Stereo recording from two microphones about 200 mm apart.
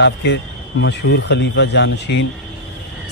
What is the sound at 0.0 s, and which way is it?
A man's voice, 60° left (ahead or behind).